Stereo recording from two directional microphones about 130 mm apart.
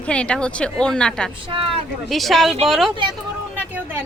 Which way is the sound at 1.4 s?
40° right (ahead or behind).